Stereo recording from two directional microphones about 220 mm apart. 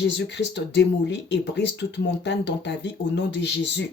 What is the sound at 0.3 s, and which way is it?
Speech, 50° left (ahead or behind).